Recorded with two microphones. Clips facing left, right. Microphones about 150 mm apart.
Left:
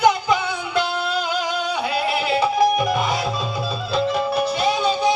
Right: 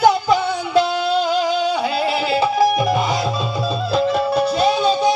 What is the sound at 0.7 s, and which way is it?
Music, 35° right (ahead or behind).